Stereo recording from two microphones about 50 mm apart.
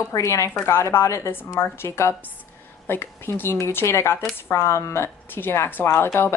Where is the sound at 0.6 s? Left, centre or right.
Left.